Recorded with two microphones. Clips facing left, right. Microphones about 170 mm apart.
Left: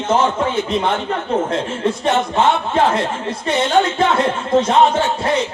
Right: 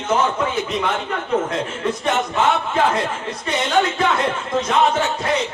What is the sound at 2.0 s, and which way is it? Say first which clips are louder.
Speech: left 3 dB; 30° left (ahead or behind).